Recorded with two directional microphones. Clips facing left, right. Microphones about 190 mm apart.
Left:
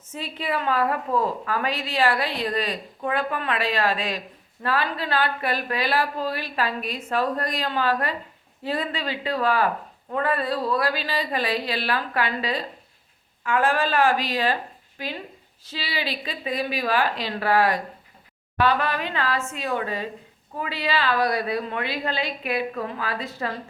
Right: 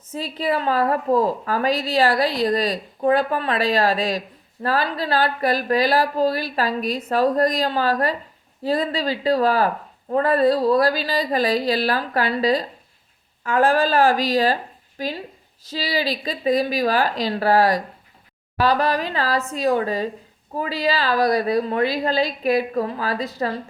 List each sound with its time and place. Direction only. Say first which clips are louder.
0.1 s a woman's voice: right 5 dB; 35° right (ahead or behind)